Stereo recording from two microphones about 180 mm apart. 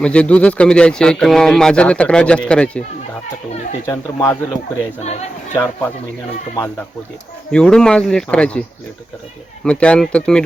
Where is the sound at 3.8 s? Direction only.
15° left (ahead or behind).